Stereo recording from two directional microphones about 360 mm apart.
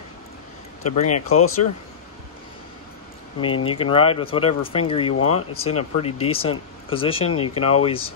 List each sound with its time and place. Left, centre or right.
1.0 s speech: left
3.3 s speech: centre